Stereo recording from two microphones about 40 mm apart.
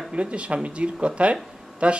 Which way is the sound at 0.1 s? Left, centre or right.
Right.